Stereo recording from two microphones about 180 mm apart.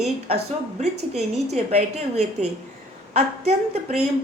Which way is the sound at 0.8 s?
40° right (ahead or behind).